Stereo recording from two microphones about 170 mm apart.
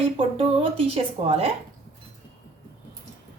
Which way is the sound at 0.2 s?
35° right (ahead or behind).